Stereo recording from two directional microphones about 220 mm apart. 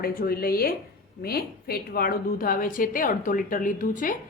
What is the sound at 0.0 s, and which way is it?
A woman's voice, 40° left (ahead or behind).